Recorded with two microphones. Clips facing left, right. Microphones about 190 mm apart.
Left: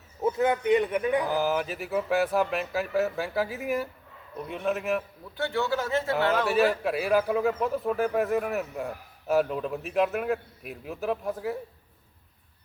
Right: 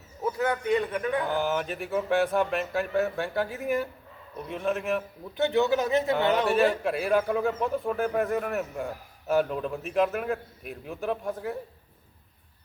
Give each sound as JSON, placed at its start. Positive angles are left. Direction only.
{"t": 0.2, "sound": "a man's voice", "side_deg": 20}
{"t": 1.2, "sound": "a man's voice", "side_deg": 0}
{"t": 5.4, "sound": "speech", "side_deg": -20}
{"t": 6.5, "sound": "a man's voice", "side_deg": 0}